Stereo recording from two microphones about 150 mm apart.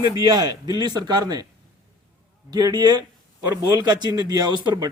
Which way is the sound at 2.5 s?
25° right (ahead or behind).